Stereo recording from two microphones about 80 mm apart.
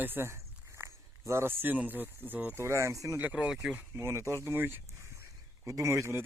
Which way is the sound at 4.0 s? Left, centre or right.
Right.